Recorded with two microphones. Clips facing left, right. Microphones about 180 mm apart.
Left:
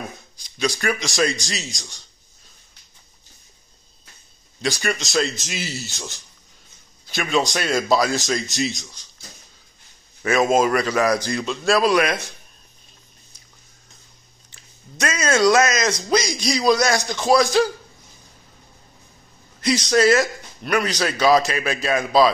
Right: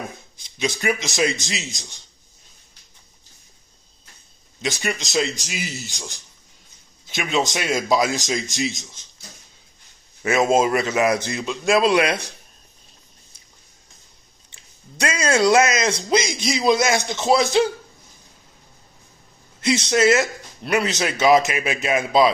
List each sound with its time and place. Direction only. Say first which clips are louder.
0.6 s speech: even; 20° right (ahead or behind)
4.6 s a man's voice: left 2 dB; 20° right (ahead or behind)
10.2 s speech: even; 25° right (ahead or behind)
14.5 s speech: left 1 dB; 30° right (ahead or behind)
19.6 s speech: left 1 dB; 25° right (ahead or behind)